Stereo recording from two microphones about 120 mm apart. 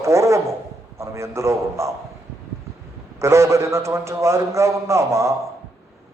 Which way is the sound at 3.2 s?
25° right (ahead or behind).